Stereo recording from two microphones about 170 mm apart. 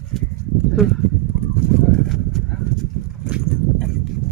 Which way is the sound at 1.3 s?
10° right (ahead or behind).